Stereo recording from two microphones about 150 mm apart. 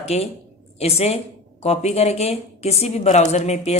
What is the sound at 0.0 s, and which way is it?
A woman's voice, 45° left (ahead or behind).